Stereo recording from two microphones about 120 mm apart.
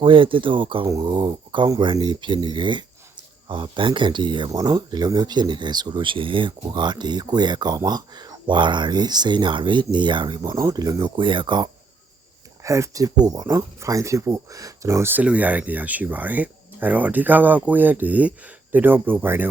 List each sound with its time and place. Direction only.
0.0 s speech: 45° right (ahead or behind)
12.6 s speech: 25° right (ahead or behind)